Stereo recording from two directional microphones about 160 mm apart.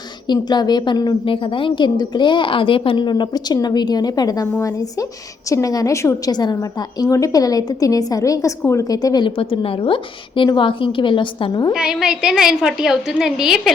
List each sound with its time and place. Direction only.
0.3 s a woman's voice: 25° left (ahead or behind)
11.7 s a woman's voice: 5° right (ahead or behind)